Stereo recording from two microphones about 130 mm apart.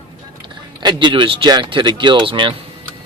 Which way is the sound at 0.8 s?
35° right (ahead or behind).